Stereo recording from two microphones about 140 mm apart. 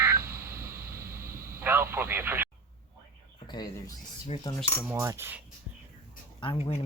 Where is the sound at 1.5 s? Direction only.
15° right (ahead or behind).